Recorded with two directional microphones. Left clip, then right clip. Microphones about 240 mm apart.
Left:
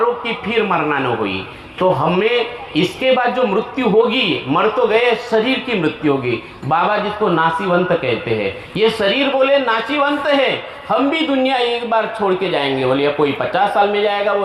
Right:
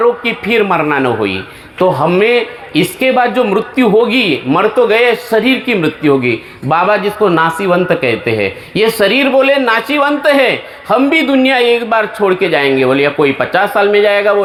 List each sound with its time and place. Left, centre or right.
0.4 s speech: right